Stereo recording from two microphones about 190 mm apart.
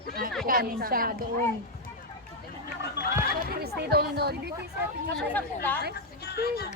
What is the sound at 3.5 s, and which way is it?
Speech, 55° right (ahead or behind).